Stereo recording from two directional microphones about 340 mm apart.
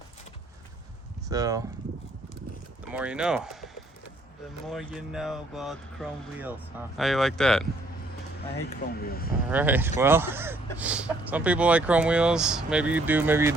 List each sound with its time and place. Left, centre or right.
1.3 s speech: centre
2.9 s speech: centre
8.6 s speech: left
9.5 s speech: centre